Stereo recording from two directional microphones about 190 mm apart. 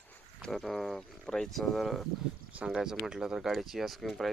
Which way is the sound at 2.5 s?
5° right (ahead or behind).